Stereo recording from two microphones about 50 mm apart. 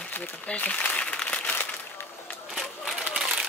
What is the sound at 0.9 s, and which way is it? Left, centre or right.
Applause, left.